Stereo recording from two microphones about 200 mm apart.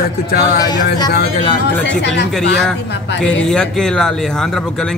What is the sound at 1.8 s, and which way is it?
Speech, 60° left (ahead or behind).